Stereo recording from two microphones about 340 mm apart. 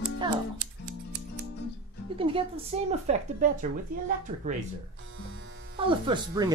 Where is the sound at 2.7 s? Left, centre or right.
Centre.